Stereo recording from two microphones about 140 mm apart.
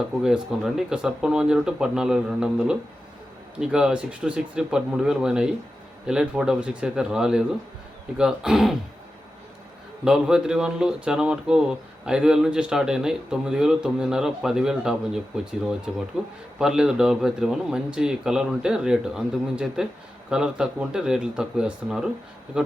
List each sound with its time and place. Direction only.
0.2 s speech: 5° right (ahead or behind)
10.0 s speech: 5° right (ahead or behind)